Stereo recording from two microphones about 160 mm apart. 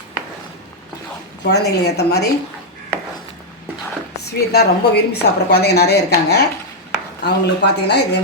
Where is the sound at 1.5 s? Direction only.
90° left.